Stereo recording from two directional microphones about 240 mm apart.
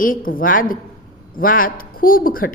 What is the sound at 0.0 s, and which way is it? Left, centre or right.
A woman's voice, left.